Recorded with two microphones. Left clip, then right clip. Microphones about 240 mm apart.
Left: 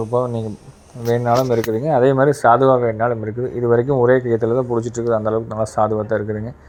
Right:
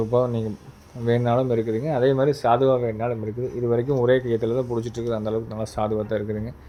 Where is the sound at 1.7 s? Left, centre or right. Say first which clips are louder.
Left 7 dB; centre.